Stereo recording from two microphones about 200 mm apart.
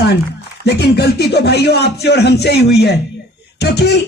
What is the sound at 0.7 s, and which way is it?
Speech, 55° left (ahead or behind).